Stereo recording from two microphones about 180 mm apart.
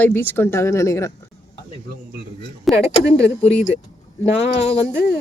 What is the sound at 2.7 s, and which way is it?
Speech, 70° left (ahead or behind).